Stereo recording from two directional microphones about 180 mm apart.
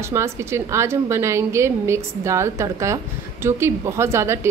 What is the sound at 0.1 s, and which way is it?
A woman's voice, 15° right (ahead or behind).